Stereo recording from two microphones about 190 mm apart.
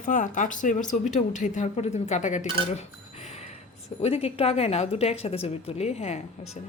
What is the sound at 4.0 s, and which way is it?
Speech, 30° left (ahead or behind).